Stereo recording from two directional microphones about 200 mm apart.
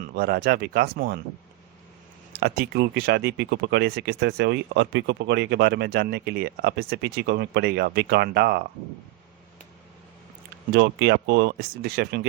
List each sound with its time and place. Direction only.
0.0 s speech: 45° right (ahead or behind)
2.3 s speech: 50° right (ahead or behind)
10.7 s speech: 60° right (ahead or behind)